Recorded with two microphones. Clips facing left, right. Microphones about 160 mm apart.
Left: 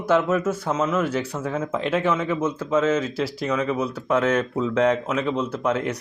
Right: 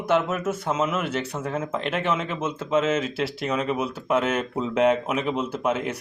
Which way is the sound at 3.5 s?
10° right (ahead or behind).